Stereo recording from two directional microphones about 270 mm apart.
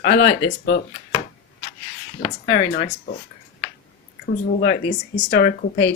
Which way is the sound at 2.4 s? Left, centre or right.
Left.